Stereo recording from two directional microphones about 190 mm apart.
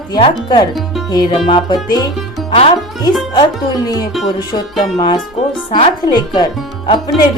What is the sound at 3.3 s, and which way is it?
Speech, 20° left (ahead or behind).